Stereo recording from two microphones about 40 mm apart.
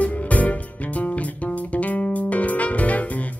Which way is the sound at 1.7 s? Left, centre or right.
Left.